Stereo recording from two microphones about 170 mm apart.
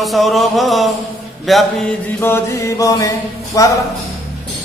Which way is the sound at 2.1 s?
15° left (ahead or behind).